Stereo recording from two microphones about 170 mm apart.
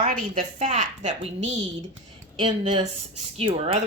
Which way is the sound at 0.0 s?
55° right (ahead or behind).